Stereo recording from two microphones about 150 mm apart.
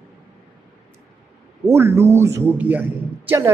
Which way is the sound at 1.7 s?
15° right (ahead or behind).